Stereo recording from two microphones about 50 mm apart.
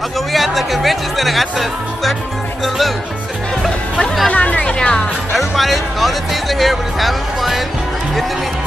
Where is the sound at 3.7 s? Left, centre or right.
Centre.